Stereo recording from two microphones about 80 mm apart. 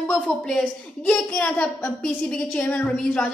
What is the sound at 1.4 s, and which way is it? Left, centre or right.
A woman's voice, centre.